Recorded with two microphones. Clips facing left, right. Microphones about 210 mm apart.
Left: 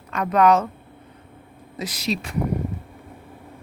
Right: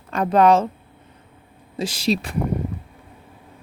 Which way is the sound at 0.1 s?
30° right (ahead or behind).